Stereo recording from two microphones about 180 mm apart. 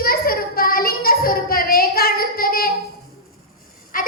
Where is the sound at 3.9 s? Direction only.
50° left (ahead or behind).